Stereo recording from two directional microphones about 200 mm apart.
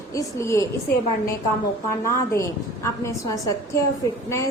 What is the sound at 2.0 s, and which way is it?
A woman's voice, 15° left (ahead or behind).